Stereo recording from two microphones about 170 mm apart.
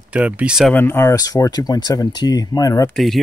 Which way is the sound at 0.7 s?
15° left (ahead or behind).